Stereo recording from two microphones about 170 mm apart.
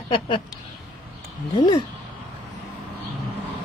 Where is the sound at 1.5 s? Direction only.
30° left (ahead or behind).